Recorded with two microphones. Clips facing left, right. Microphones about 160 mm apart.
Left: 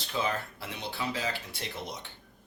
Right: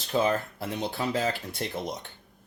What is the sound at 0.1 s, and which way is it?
Speech, 45° right (ahead or behind).